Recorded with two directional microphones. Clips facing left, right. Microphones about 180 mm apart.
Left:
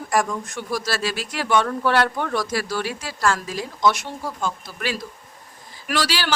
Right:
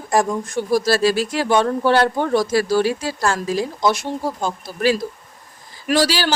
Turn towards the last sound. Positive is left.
turn(degrees=-40)  # may be behind; listen again after turning